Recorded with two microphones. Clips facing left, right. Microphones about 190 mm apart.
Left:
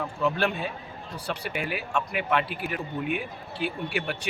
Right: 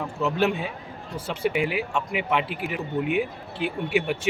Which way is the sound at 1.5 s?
75° right (ahead or behind).